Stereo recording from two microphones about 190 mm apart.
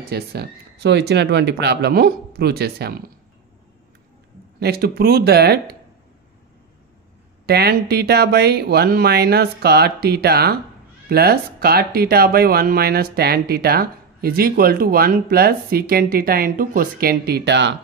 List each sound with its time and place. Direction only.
0.1 s speech: 55° right (ahead or behind)
4.6 s speech: 55° right (ahead or behind)
7.4 s speech: 55° right (ahead or behind)